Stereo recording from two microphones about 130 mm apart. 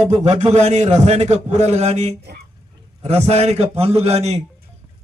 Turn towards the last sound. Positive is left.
turn(degrees=-55)  # may be behind; listen again after turning